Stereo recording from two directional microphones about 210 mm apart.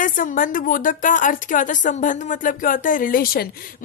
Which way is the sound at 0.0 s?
40° left (ahead or behind).